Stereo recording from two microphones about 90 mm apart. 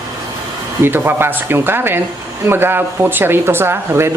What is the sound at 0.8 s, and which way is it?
Speech, 25° right (ahead or behind).